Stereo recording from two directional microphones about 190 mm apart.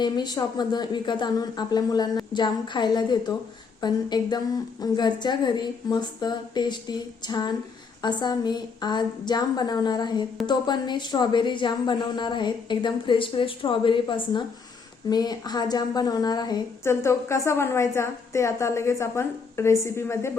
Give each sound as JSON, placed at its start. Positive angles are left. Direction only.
{"t": 0.0, "sound": "a woman's voice", "side_deg": 20}